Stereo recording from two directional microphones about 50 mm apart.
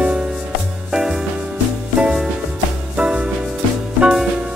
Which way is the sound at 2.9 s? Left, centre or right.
Centre.